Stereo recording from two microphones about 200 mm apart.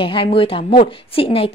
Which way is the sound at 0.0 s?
25° left (ahead or behind).